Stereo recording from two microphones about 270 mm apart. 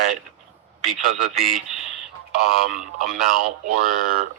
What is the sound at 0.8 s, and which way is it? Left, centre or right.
A man's voice, centre.